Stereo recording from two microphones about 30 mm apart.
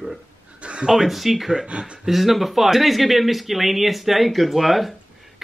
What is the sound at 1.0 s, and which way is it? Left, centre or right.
Speech, centre.